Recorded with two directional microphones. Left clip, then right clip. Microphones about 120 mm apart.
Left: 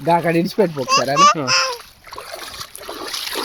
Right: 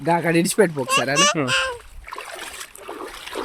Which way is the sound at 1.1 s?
60° right (ahead or behind).